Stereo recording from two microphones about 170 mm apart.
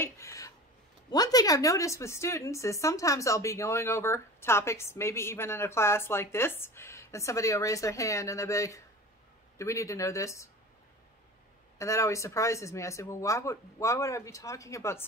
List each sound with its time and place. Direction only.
0.0 s a sound: 20° left (ahead or behind)
1.1 s a woman's voice: 20° left (ahead or behind)
11.8 s a woman's voice: 20° left (ahead or behind)